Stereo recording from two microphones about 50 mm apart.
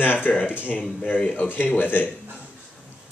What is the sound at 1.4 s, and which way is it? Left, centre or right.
Speech, left.